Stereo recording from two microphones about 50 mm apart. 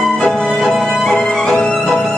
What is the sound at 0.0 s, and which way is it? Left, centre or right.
Music, centre.